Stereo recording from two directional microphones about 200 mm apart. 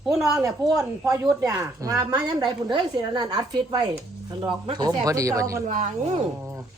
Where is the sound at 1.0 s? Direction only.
15° right (ahead or behind).